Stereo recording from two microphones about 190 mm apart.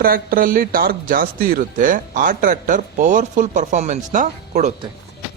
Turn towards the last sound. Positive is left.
turn(degrees=-40)  # may be behind; listen again after turning